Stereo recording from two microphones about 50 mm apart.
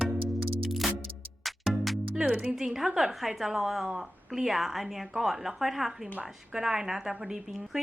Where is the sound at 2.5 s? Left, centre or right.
Centre.